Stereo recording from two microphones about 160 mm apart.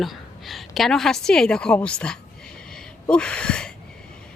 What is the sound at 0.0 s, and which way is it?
A woman's voice, centre (ahead or behind).